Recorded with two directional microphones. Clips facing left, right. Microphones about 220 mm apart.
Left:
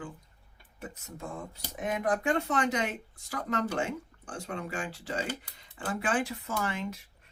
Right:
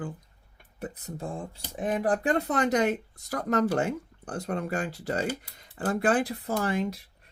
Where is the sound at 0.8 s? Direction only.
35° right (ahead or behind).